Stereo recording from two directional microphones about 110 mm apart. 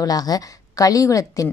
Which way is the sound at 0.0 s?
35° left (ahead or behind).